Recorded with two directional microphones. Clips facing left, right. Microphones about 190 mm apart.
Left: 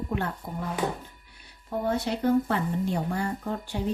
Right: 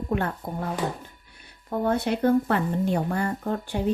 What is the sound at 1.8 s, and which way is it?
Speech, 55° right (ahead or behind).